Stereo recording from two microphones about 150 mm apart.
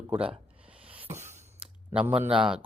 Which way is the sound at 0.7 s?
10° right (ahead or behind).